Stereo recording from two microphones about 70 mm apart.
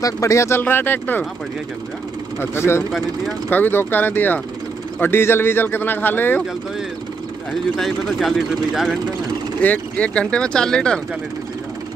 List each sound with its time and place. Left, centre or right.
0.0 s speech: left
0.6 s speech: left
2.5 s speech: left
3.4 s speech: left
7.7 s speech: centre
9.6 s speech: left